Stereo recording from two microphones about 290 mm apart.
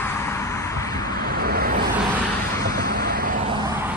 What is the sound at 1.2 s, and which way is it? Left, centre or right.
Vehicle, right.